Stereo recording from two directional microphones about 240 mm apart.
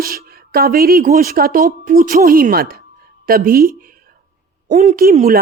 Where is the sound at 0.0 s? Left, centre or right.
Right.